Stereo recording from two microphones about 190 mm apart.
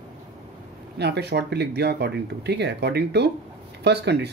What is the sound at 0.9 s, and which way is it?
Speech, 60° right (ahead or behind).